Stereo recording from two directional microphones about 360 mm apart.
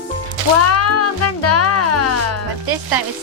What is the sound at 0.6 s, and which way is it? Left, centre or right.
Music, left.